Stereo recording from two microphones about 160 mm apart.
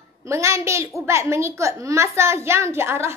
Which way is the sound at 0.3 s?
20° right (ahead or behind).